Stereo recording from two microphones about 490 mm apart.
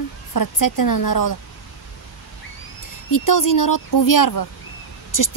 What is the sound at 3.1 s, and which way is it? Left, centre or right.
A woman's voice, left.